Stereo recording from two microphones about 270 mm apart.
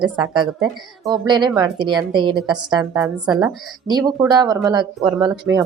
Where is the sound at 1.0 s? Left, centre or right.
Centre.